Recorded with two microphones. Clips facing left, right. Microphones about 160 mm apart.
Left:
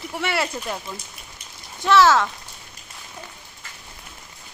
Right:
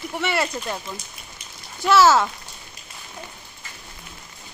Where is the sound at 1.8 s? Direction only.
5° right (ahead or behind).